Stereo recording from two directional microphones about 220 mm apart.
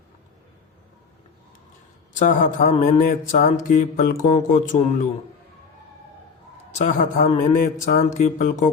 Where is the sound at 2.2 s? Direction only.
35° left (ahead or behind).